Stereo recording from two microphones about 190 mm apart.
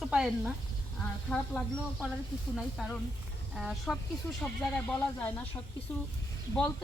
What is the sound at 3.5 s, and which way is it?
Speech, centre (ahead or behind).